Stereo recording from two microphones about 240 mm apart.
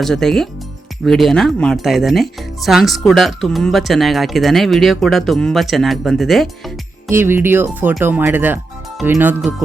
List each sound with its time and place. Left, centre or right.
0.0 s speech: centre
7.1 s speech: centre